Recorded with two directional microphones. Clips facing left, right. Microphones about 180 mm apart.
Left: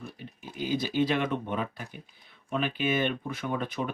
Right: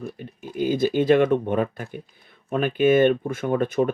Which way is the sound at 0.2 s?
50° right (ahead or behind).